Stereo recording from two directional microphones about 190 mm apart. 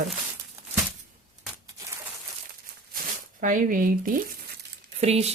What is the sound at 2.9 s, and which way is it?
Speech, 45° right (ahead or behind).